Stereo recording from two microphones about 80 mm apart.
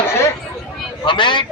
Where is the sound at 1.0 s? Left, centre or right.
Left.